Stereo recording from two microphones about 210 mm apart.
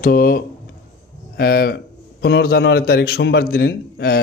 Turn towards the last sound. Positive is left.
turn(degrees=50)  # may be behind; listen again after turning